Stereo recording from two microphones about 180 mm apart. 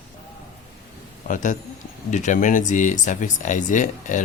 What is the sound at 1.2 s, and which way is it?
Speech, 45° left (ahead or behind).